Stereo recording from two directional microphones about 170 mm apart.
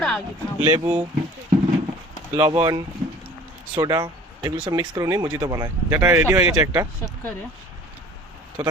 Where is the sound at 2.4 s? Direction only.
20° right (ahead or behind).